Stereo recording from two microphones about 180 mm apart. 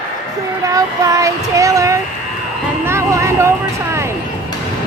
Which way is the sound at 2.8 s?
15° right (ahead or behind).